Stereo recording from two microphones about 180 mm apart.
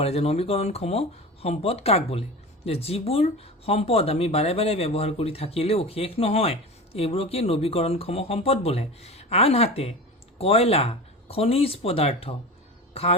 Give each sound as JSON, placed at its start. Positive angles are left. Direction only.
{"t": 0.0, "sound": "speech", "side_deg": 35}